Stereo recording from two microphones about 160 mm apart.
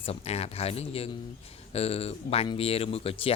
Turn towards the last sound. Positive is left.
turn(degrees=35)  # may be behind; listen again after turning